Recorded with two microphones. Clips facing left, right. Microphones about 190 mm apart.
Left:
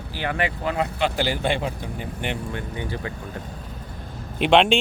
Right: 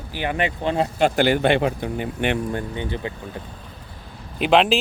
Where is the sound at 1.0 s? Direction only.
50° right (ahead or behind); by 2.3 s 70° right (ahead or behind).